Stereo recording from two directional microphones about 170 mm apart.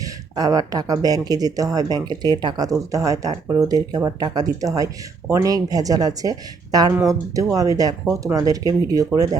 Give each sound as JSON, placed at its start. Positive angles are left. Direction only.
{"t": 0.0, "sound": "speech", "side_deg": -20}